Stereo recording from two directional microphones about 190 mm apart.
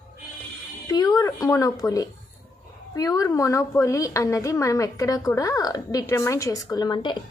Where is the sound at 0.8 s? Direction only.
20° left (ahead or behind).